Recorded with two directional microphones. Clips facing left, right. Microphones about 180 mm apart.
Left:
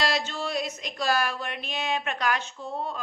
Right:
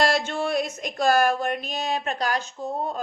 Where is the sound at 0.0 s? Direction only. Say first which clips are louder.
Right 5 dB; 50° right (ahead or behind).